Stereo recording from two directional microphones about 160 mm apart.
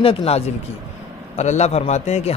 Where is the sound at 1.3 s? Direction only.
45° left (ahead or behind).